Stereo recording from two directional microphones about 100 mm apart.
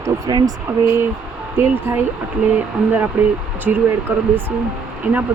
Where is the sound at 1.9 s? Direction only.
25° right (ahead or behind).